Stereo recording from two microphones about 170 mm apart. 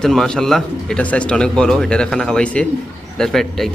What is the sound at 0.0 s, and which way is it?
Speech, centre (ahead or behind).